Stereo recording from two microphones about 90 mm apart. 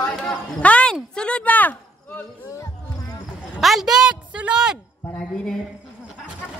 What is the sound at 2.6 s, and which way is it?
Music, 45° left (ahead or behind).